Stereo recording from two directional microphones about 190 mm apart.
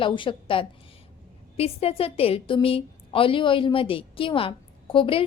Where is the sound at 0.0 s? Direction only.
25° left (ahead or behind).